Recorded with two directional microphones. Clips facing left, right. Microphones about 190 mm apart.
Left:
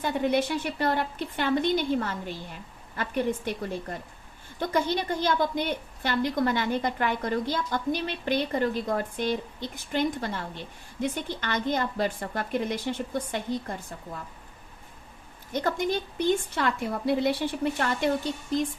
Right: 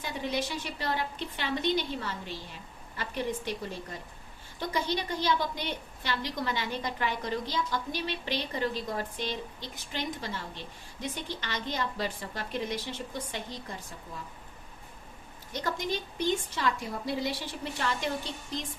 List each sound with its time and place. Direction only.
0.0 s a woman's voice: 55° left (ahead or behind)
4.6 s a woman's voice: 55° left (ahead or behind)
15.5 s a woman's voice: 55° left (ahead or behind)